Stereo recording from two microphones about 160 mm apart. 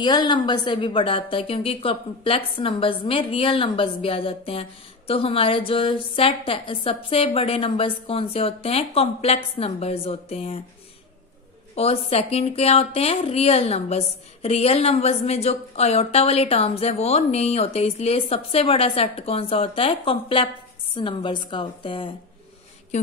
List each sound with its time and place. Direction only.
0.0 s a woman's voice: 25° left (ahead or behind)
11.7 s a woman's voice: 40° left (ahead or behind)